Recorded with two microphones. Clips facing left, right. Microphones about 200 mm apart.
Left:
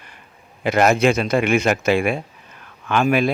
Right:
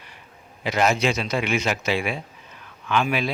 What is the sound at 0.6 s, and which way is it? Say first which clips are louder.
Speech: left 5 dB; 55° left (ahead or behind).